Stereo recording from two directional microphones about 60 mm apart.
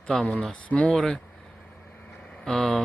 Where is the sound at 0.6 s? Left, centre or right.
Left.